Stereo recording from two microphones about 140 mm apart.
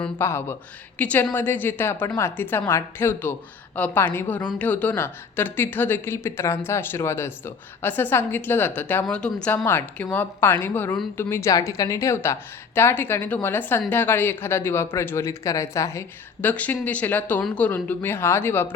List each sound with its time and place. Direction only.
0.0 s a woman's voice: 15° left (ahead or behind)